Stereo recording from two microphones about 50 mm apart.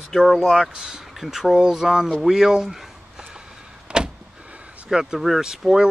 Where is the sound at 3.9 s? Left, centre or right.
Right.